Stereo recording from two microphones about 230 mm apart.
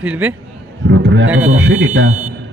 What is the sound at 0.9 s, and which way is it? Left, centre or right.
A man's voice, right.